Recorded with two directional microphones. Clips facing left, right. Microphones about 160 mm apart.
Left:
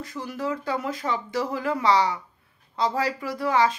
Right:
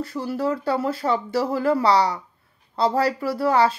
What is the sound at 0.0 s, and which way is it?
A woman's voice, 35° right (ahead or behind).